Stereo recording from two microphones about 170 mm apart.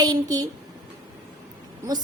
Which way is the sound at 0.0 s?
20° right (ahead or behind).